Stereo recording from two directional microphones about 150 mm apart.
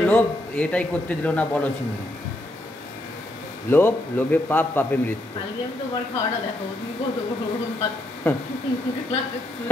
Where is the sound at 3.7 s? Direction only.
15° left (ahead or behind).